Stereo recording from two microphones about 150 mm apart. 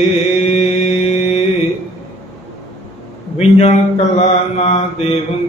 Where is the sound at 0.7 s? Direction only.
45° left (ahead or behind).